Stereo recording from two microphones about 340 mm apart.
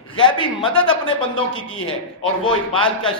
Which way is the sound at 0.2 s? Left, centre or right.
Centre.